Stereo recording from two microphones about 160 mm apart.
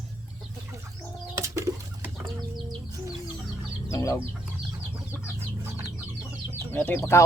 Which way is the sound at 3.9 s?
20° left (ahead or behind).